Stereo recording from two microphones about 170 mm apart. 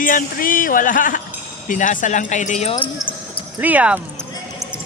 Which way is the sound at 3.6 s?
10° right (ahead or behind).